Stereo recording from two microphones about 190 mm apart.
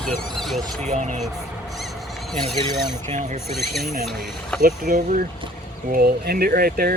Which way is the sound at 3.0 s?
40° right (ahead or behind).